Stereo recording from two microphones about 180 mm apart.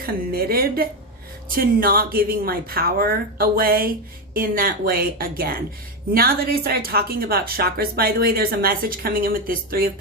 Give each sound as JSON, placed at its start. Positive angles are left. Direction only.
{"t": 0.0, "sound": "speech", "side_deg": -55}